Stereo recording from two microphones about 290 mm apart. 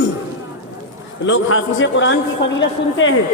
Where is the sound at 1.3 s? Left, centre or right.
Left.